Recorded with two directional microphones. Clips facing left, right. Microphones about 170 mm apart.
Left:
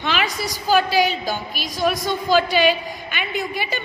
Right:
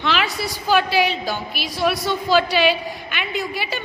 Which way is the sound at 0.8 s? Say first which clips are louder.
Left 1 dB; 40° left (ahead or behind).